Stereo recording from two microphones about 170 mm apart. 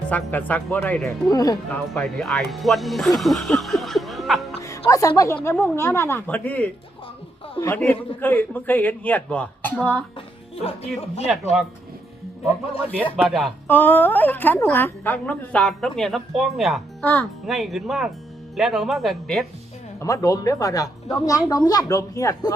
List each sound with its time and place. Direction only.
0.1 s a woman's voice: 10° left (ahead or behind)
1.3 s speech: 20° left (ahead or behind)
1.7 s speech: 5° left (ahead or behind)
3.2 s music: centre (ahead or behind)
4.9 s a woman's voice: 20° left (ahead or behind)
10.2 s speech: 35° left (ahead or behind)
13.1 s speech: centre (ahead or behind)
13.7 s a woman's voice: 10° left (ahead or behind)
20.0 s speech: 20° left (ahead or behind)